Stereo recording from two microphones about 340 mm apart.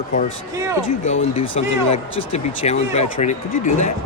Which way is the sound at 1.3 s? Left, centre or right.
Centre.